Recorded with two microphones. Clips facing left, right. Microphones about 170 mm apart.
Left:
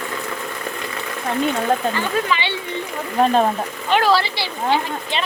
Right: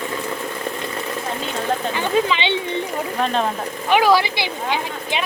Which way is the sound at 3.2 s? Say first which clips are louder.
Left 6 dB; 40° left (ahead or behind).